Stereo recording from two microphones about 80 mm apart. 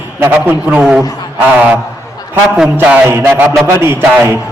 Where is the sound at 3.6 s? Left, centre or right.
Right.